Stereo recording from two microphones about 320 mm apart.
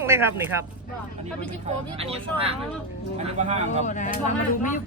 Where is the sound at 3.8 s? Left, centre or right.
Left.